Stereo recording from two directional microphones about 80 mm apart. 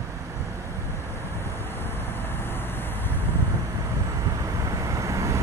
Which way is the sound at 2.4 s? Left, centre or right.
Left.